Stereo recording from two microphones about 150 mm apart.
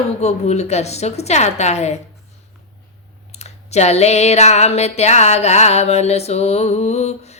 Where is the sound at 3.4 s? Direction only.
45° left (ahead or behind).